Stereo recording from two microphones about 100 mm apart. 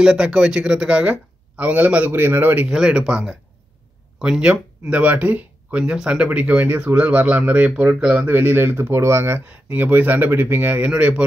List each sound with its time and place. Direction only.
0.0 s speech: 10° right (ahead or behind)
2.7 s speech: 5° right (ahead or behind); by 9.4 s 25° right (ahead or behind)
9.5 s speech: 15° right (ahead or behind)